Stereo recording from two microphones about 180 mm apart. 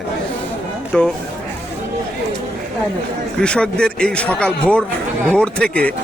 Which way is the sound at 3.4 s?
5° left (ahead or behind).